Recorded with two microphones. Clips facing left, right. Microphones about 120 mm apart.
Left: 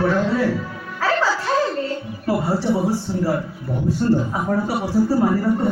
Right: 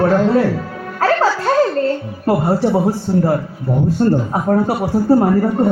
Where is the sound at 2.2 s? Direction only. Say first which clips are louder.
Right 5 dB; 50° right (ahead or behind).